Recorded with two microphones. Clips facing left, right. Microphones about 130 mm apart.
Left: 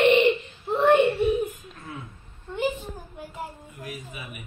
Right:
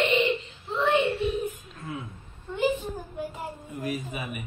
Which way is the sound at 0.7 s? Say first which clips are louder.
Left 5 dB; 60° left (ahead or behind).